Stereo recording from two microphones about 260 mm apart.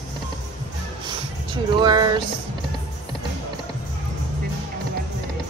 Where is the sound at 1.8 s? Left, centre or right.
Centre.